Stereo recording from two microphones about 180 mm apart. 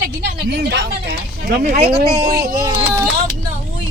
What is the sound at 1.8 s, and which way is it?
Speech, 30° right (ahead or behind).